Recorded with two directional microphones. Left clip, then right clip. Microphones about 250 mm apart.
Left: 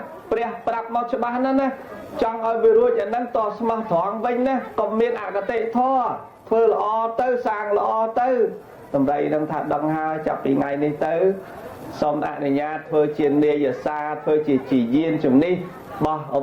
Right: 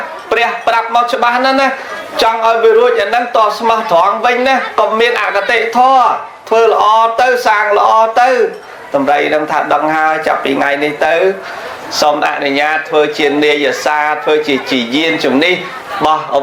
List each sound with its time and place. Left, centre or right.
0.3 s speech: centre
8.9 s a man's voice: centre
9.1 s speech: centre